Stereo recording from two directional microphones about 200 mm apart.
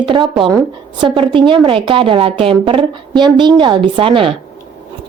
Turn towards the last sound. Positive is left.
turn(degrees=-25)  # may be behind; listen again after turning